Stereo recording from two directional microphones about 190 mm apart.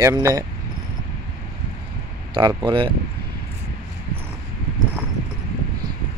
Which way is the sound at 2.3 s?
20° right (ahead or behind).